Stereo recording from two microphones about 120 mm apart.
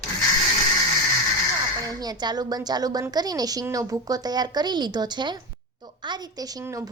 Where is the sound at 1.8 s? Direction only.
35° right (ahead or behind).